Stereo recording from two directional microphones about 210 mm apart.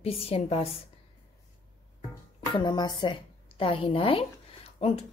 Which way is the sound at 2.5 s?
20° left (ahead or behind).